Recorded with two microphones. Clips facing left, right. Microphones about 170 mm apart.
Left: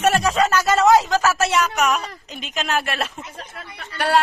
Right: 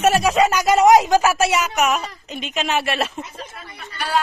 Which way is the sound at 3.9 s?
70° left (ahead or behind).